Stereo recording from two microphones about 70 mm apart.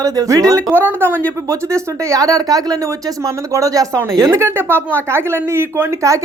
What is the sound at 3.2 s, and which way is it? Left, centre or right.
Speech, right.